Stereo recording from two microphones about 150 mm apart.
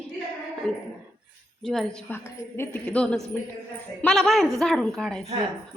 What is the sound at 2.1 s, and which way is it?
A woman's voice, 15° left (ahead or behind).